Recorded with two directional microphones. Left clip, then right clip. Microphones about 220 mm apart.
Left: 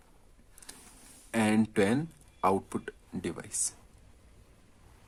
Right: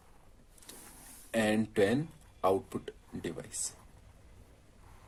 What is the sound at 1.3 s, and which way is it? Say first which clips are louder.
Speech: left 2 dB; 50° left (ahead or behind).